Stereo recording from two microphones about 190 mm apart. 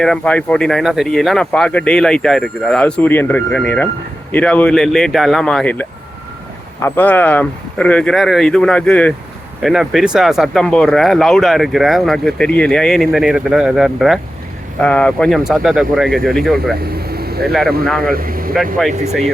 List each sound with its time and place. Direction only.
0.0 s speech: 5° left (ahead or behind)
17.0 s vehicle: 55° right (ahead or behind)
17.5 s speech: centre (ahead or behind)
18.0 s speech: 50° right (ahead or behind)
18.5 s speech: centre (ahead or behind)